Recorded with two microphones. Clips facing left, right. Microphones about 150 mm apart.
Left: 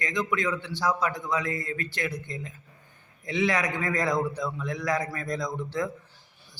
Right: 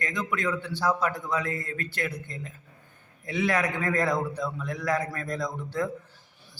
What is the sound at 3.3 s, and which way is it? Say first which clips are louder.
A man's voice: even; 50° right (ahead or behind).